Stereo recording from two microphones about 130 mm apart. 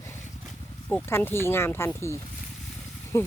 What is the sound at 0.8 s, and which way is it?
Speech, 15° left (ahead or behind).